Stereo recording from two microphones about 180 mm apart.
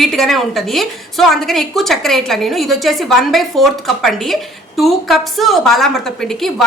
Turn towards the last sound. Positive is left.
turn(degrees=0)  # may be behind; listen again after turning